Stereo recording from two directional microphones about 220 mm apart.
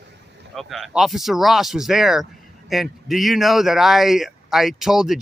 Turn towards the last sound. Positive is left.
turn(degrees=0)  # may be behind; listen again after turning